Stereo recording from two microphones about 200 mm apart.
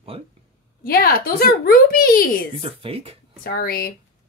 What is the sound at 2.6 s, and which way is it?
Speech, 30° right (ahead or behind).